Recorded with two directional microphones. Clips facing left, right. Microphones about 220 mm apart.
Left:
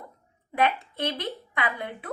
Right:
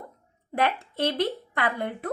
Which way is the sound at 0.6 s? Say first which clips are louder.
Even; 50° right (ahead or behind).